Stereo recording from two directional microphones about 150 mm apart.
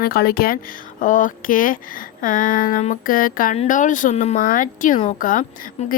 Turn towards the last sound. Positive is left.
turn(degrees=60)  # may be behind; listen again after turning